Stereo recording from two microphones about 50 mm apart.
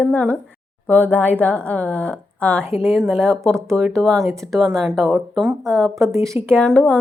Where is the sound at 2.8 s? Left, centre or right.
Centre.